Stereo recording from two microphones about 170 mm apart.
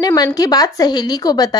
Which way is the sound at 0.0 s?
20° left (ahead or behind).